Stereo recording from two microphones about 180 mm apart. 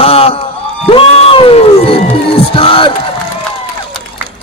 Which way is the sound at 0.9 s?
30° left (ahead or behind).